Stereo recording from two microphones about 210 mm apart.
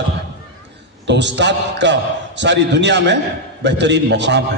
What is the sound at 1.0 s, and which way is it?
A man's voice, 55° right (ahead or behind).